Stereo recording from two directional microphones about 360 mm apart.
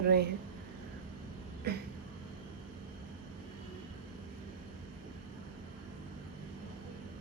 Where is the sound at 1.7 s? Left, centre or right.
Right.